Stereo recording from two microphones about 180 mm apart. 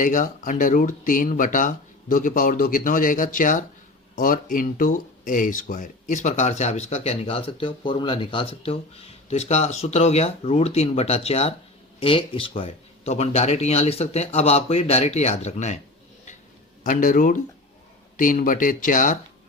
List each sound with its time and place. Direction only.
0.0 s speech: 45° left (ahead or behind)
16.8 s speech: 45° left (ahead or behind)